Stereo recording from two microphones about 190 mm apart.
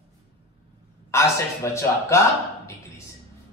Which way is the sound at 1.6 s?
15° left (ahead or behind).